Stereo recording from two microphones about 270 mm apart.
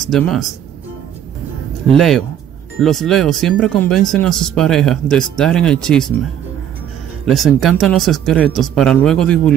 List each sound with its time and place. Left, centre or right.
0.0 s speech: centre
1.9 s speech: centre
7.2 s speech: centre